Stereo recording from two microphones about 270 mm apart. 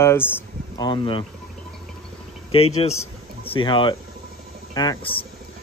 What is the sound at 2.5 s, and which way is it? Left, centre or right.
Speech, left.